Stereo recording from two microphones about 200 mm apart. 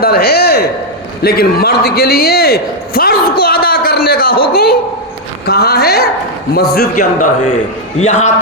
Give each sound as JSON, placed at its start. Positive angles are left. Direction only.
{"t": 0.0, "sound": "a man's voice", "side_deg": 50}
{"t": 6.7, "sound": "a man's voice", "side_deg": 40}